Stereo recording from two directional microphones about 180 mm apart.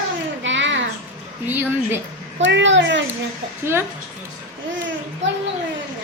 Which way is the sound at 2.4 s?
85° right.